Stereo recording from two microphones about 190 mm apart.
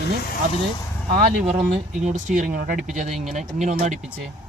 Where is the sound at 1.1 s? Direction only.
50° right (ahead or behind).